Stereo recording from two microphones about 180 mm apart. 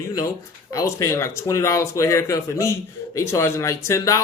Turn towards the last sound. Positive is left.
turn(degrees=15)  # may be behind; listen again after turning